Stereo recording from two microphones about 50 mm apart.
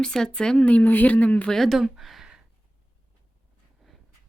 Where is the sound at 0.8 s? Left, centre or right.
Left.